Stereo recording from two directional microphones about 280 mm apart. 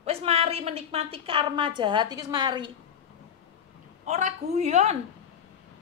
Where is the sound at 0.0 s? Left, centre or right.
Right.